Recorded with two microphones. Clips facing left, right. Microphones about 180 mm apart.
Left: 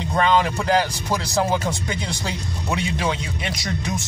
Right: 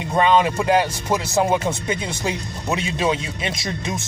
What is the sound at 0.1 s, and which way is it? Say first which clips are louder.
Speech: right 3 dB; 20° right (ahead or behind).